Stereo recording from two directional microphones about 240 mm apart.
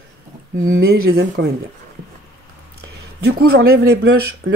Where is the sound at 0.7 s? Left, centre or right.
Right.